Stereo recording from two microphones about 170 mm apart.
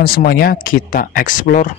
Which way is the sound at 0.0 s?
60° left (ahead or behind).